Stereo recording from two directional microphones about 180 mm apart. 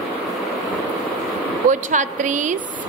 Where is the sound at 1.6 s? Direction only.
45° right (ahead or behind).